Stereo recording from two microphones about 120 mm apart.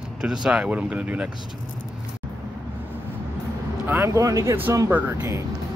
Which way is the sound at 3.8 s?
20° right (ahead or behind).